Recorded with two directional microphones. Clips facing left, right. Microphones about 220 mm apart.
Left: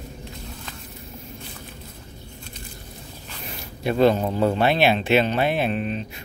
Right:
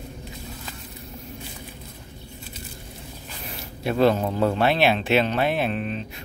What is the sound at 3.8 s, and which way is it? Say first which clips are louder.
Speech: left 1 dB; centre (ahead or behind).